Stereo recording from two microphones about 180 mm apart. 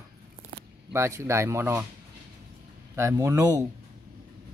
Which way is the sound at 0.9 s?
15° right (ahead or behind).